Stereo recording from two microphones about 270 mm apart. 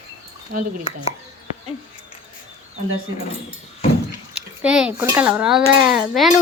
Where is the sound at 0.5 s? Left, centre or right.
Right.